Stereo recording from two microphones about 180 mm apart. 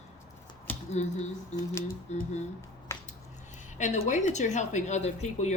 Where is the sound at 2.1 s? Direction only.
40° left (ahead or behind).